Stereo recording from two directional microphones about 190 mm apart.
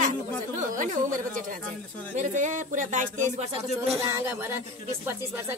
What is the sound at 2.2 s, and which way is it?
Speech, 40° right (ahead or behind).